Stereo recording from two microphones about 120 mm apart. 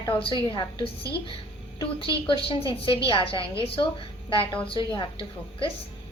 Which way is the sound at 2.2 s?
45° left (ahead or behind).